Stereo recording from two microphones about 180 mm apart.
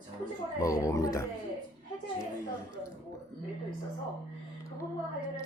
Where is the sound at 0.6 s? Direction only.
20° left (ahead or behind).